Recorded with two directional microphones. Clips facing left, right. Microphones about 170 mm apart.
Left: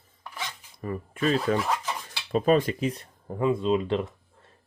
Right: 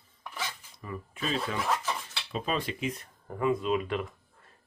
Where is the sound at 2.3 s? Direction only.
45° left (ahead or behind).